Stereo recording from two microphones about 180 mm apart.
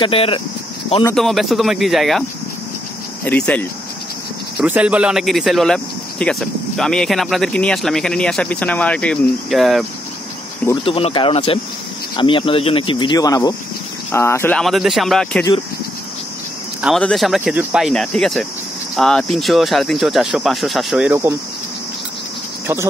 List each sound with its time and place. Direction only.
0.0 s speech: 30° left (ahead or behind)
1.1 s speech: centre (ahead or behind)
3.3 s speech: 5° left (ahead or behind)
4.6 s speech: 5° right (ahead or behind)
10.8 s speech: 30° left (ahead or behind); by 14.6 s 15° left (ahead or behind)
14.6 s speech: centre (ahead or behind)
16.8 s speech: centre (ahead or behind)
21.1 s speech: 15° right (ahead or behind)